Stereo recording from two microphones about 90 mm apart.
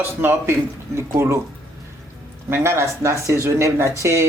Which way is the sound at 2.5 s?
30° right (ahead or behind).